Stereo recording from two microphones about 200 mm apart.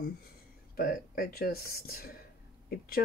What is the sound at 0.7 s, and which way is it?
A woman's voice, 50° left (ahead or behind).